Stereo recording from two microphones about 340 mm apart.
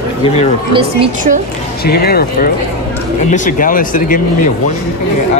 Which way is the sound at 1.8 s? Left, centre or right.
Left.